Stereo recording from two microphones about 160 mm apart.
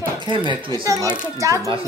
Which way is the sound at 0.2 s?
30° right (ahead or behind).